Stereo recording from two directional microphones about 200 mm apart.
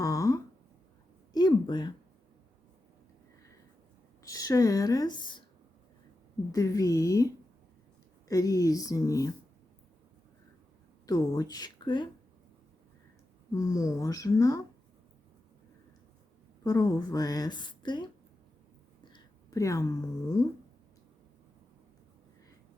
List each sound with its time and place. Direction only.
0.0 s a sound: 15° left (ahead or behind)
4.2 s speech: 15° left (ahead or behind)
6.5 s speech: 15° left (ahead or behind)
8.3 s speech: 15° left (ahead or behind)
11.0 s speech: 20° left (ahead or behind)
13.5 s speech: 15° left (ahead or behind)
16.6 s a woman's voice: 15° left (ahead or behind)